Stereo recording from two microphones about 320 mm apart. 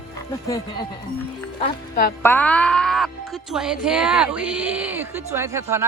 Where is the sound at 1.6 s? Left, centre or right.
Left.